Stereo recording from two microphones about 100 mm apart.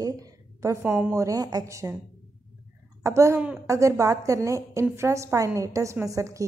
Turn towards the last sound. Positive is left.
turn(degrees=-35)  # may be behind; listen again after turning